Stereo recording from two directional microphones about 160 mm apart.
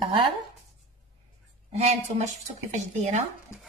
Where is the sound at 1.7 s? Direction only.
45° right (ahead or behind).